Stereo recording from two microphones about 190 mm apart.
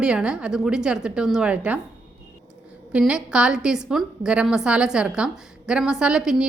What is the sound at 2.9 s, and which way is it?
A woman's voice, 5° right (ahead or behind).